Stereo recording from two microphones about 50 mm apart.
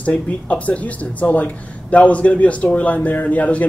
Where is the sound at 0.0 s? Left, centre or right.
Left.